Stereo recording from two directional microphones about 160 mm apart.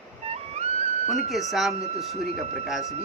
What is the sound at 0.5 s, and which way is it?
Music, 45° right (ahead or behind).